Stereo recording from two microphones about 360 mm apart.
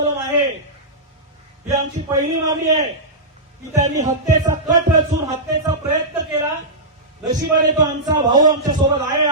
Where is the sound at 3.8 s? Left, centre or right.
Centre.